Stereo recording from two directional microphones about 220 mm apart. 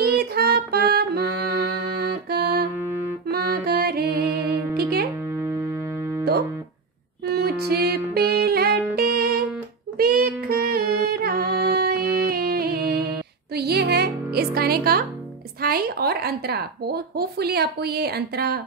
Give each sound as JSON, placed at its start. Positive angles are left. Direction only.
{"t": 0.0, "sound": "music", "side_deg": -45}
{"t": 2.2, "sound": "music", "side_deg": -45}
{"t": 4.3, "sound": "music", "side_deg": -10}
{"t": 7.2, "sound": "music", "side_deg": -45}
{"t": 15.6, "sound": "a sound", "side_deg": -45}